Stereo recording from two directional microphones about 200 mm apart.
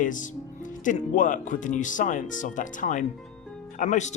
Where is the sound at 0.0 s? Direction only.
40° left (ahead or behind).